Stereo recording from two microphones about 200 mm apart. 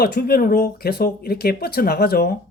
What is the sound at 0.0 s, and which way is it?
Speech, 50° left (ahead or behind).